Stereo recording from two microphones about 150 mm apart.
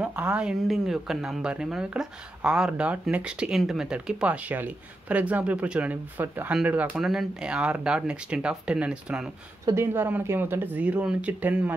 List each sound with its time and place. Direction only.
0.0 s speech: 10° right (ahead or behind)